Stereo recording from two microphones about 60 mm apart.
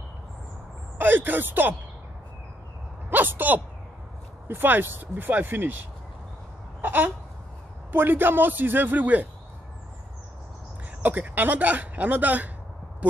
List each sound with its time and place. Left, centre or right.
0.9 s speech: right
3.1 s speech: right
6.8 s a sound: right
7.9 s speech: right
11.0 s speech: right